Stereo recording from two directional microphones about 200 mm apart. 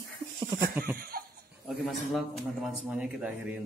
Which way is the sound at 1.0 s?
45° right (ahead or behind).